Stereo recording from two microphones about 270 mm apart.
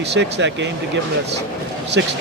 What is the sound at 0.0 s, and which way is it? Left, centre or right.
Speech, right.